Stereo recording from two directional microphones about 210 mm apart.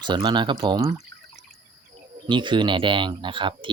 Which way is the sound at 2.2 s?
20° right (ahead or behind).